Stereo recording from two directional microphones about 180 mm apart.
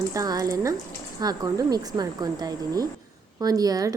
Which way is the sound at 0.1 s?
20° right (ahead or behind).